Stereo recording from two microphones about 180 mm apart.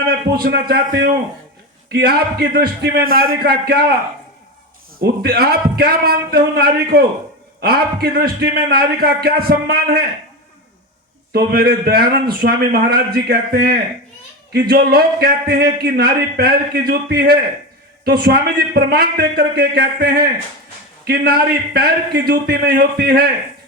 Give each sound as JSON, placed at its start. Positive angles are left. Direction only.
{"t": 0.1, "sound": "a man's voice", "side_deg": -60}
{"t": 4.9, "sound": "a man's voice", "side_deg": -60}
{"t": 11.3, "sound": "a man's voice", "side_deg": -60}